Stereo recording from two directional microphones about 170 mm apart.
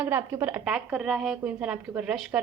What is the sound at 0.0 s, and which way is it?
A woman's voice, 10° right (ahead or behind).